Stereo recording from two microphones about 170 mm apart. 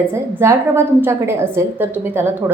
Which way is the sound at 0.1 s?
15° right (ahead or behind).